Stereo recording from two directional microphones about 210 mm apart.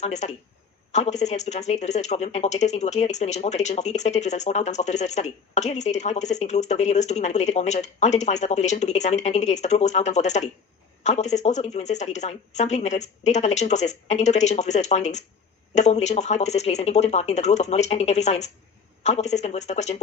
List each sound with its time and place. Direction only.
0.0 s speech: 35° left (ahead or behind)